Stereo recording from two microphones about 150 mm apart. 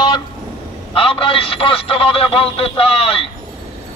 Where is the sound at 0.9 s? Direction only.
35° left (ahead or behind).